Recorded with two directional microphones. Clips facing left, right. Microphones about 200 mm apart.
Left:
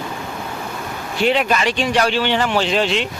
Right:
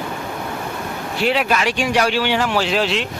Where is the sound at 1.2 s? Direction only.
5° right (ahead or behind).